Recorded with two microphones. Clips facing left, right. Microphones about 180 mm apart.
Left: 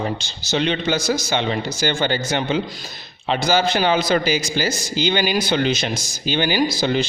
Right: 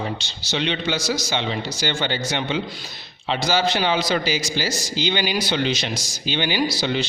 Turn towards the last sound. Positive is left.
turn(degrees=45)  # may be behind; listen again after turning